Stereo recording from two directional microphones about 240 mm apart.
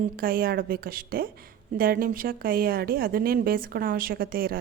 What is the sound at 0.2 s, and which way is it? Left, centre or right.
Speech, right.